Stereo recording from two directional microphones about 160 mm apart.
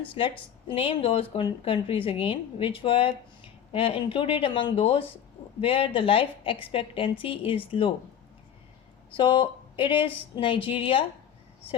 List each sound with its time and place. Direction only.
0.2 s speech: 35° left (ahead or behind)
9.1 s speech: 30° left (ahead or behind)